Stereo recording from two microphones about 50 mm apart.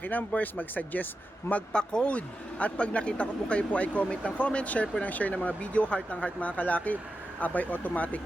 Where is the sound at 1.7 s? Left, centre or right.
Centre.